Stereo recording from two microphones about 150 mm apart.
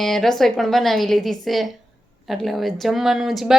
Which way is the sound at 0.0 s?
Centre (ahead or behind).